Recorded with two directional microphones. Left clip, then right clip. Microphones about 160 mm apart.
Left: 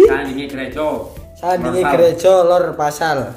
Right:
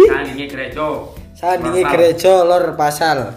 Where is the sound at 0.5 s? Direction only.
55° left (ahead or behind).